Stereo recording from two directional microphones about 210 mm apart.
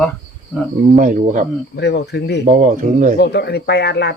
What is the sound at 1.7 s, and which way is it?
Speech, 55° left (ahead or behind).